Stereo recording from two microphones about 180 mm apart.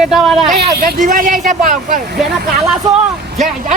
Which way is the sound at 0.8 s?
50° right (ahead or behind).